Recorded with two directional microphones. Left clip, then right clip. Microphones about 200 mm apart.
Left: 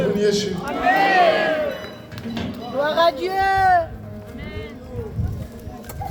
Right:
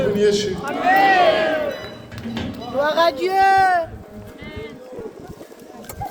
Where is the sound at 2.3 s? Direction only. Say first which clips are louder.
Right 2 dB; 40° right (ahead or behind).